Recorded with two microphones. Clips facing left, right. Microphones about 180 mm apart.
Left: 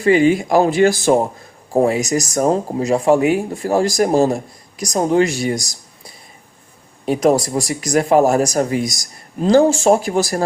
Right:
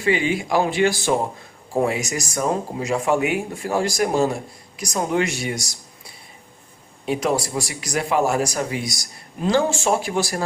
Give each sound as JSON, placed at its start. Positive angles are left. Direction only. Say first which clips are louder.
{"t": 0.0, "sound": "speech", "louder": "left 8 dB", "side_deg": 45}
{"t": 7.0, "sound": "speech", "louder": "left 7 dB", "side_deg": 40}